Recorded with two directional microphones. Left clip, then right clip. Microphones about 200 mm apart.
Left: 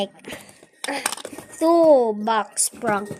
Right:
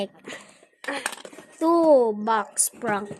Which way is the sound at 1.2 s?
40° left (ahead or behind).